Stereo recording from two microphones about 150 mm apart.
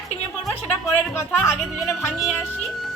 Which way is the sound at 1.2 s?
15° left (ahead or behind).